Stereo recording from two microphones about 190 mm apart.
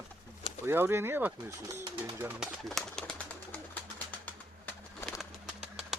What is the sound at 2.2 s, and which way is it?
Bird, 5° right (ahead or behind).